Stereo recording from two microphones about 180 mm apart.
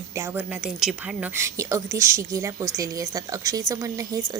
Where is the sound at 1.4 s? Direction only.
15° right (ahead or behind).